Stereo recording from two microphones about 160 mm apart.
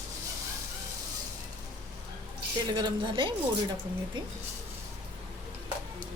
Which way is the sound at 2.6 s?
25° right (ahead or behind).